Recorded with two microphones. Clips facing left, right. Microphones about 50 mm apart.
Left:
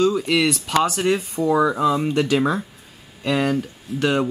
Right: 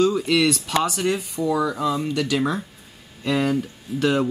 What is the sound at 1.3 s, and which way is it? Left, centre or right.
Speech, left.